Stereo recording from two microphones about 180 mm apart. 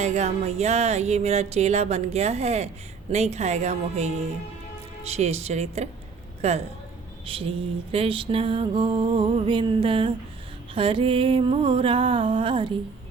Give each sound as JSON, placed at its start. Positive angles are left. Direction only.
{"t": 0.0, "sound": "music", "side_deg": -40}